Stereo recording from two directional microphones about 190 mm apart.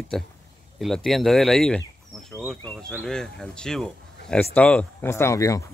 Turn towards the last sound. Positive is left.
turn(degrees=15)  # may be behind; listen again after turning